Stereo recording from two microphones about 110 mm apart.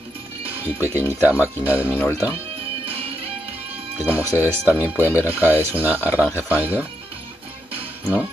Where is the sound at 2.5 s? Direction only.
60° right (ahead or behind).